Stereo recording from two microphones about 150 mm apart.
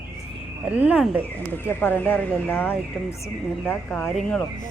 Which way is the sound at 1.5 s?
15° left (ahead or behind).